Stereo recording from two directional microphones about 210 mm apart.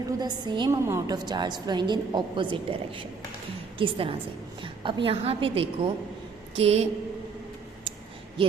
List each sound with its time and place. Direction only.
0.2 s a woman's voice: 20° right (ahead or behind)
8.4 s a woman's voice: 25° right (ahead or behind)